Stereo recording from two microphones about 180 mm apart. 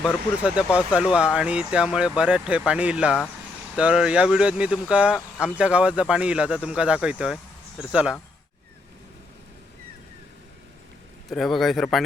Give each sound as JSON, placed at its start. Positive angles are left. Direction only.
{"t": 0.0, "sound": "speech", "side_deg": -5}
{"t": 11.3, "sound": "speech", "side_deg": 0}